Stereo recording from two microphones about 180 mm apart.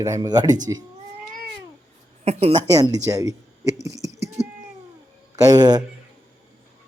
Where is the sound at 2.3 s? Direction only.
35° right (ahead or behind).